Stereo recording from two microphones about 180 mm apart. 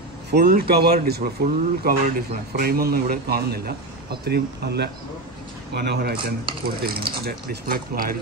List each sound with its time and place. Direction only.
0.3 s a man's voice: 60° right (ahead or behind)
6.2 s a man's voice: 55° right (ahead or behind)